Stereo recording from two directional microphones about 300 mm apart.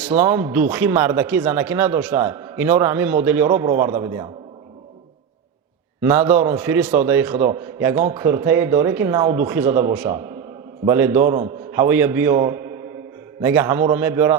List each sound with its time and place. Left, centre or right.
0.0 s a man's voice: centre
6.0 s a man's voice: centre